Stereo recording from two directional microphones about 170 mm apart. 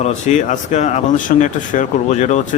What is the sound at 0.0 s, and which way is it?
A man's voice, 45° left (ahead or behind).